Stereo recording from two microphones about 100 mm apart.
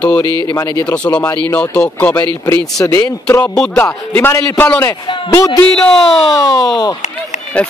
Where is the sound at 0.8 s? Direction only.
15° left (ahead or behind).